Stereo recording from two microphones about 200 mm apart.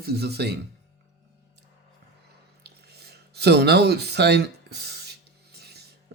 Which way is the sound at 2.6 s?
55° right (ahead or behind).